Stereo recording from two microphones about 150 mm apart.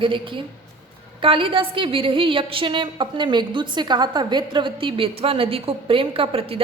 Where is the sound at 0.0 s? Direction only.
35° right (ahead or behind).